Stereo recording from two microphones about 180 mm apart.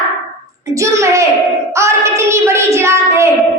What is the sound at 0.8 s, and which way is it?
Speech, 15° right (ahead or behind).